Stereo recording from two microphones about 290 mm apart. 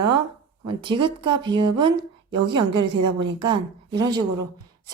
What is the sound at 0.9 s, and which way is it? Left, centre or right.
A woman's voice, centre.